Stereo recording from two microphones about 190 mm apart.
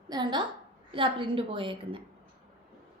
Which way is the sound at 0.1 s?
25° right (ahead or behind).